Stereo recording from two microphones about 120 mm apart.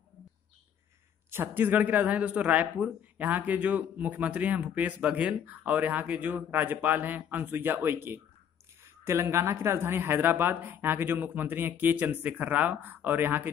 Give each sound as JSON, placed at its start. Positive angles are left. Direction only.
{"t": 1.3, "sound": "speech", "side_deg": -15}